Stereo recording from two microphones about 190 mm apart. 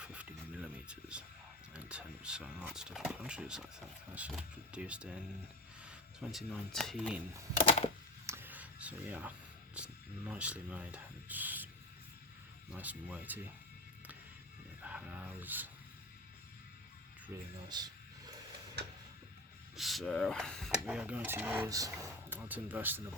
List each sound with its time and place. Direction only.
0.0 s music: 5° right (ahead or behind)
1.7 s speech: 5° right (ahead or behind)
5.8 s a sound: 5° right (ahead or behind)
6.5 s speech: centre (ahead or behind)
7.6 s typewriter: 30° left (ahead or behind)
8.3 s clicking: 10° right (ahead or behind)
9.7 s speech: 5° right (ahead or behind)
12.7 s rub: 10° right (ahead or behind)
14.8 s a sound: 10° right (ahead or behind)
17.7 s speech: 20° right (ahead or behind)
19.7 s rub: centre (ahead or behind)